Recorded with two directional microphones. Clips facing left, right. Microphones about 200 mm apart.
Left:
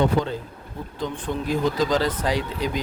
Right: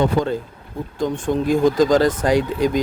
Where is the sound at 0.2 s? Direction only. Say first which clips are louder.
Right 4 dB; 45° right (ahead or behind).